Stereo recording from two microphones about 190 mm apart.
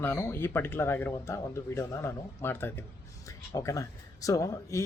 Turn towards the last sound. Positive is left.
turn(degrees=20)  # may be behind; listen again after turning